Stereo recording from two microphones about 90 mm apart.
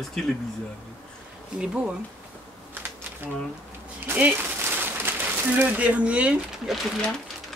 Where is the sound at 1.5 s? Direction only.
10° right (ahead or behind).